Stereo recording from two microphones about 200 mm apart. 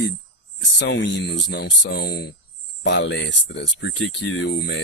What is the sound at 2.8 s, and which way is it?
Speech, 65° left (ahead or behind).